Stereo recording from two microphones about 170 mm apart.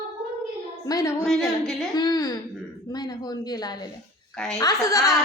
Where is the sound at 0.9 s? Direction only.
20° left (ahead or behind).